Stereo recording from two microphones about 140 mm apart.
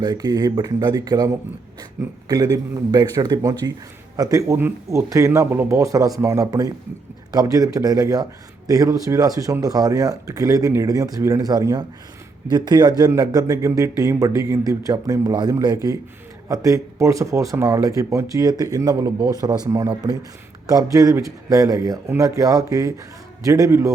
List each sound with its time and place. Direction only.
0.0 s a man's voice: 25° right (ahead or behind)
20.9 s a man's voice: 25° right (ahead or behind)